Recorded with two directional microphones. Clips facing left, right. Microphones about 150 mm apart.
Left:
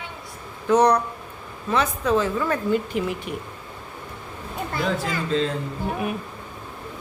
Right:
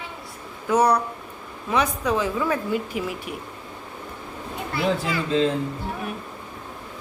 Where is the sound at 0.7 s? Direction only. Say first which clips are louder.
Left 2 dB; 10° right (ahead or behind).